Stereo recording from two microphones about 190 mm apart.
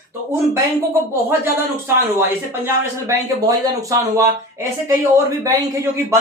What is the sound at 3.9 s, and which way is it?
Speech, 15° right (ahead or behind).